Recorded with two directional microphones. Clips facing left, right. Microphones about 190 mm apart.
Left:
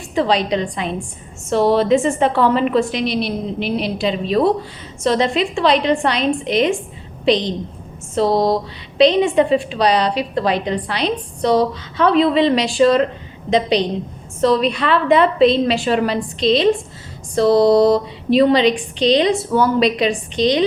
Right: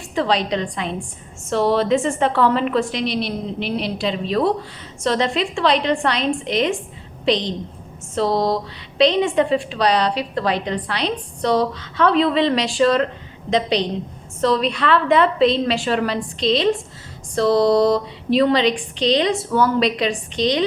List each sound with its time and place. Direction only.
0.1 s a woman's voice: 15° left (ahead or behind)